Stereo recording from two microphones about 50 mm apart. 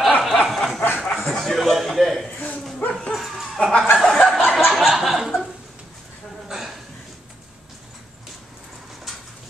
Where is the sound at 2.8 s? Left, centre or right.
Left.